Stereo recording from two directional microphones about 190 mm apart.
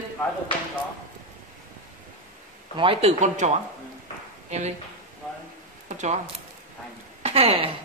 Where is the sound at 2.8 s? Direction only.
30° right (ahead or behind).